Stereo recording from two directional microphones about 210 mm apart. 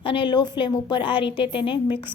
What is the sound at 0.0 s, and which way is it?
A woman's voice, 25° left (ahead or behind).